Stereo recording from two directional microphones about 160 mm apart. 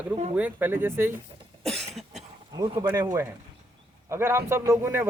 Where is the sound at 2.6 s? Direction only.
25° right (ahead or behind).